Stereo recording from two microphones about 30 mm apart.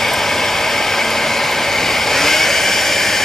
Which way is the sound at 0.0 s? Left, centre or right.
Centre.